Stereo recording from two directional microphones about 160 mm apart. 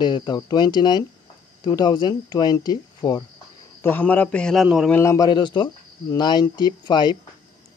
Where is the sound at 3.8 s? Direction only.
10° left (ahead or behind).